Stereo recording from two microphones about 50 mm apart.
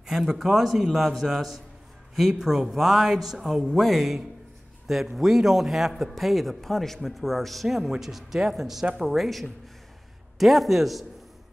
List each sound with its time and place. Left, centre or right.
0.0 s a man's voice: centre